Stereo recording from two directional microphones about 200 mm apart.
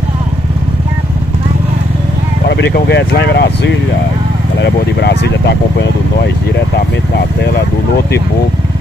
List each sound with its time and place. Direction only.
2.4 s speech: 55° left (ahead or behind)